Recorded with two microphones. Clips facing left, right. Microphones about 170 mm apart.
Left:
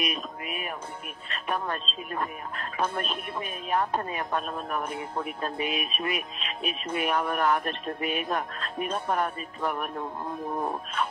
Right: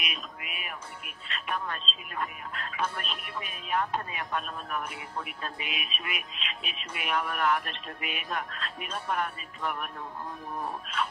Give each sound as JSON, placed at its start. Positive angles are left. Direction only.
{"t": 0.0, "sound": "speech", "side_deg": 40}